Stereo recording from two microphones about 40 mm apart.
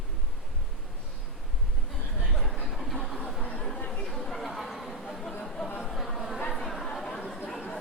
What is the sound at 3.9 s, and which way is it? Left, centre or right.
Chatter, centre.